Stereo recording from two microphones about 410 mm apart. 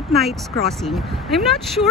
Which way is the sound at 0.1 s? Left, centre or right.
Centre.